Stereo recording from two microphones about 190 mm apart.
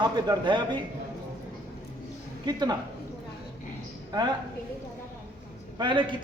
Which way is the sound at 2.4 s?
25° right (ahead or behind).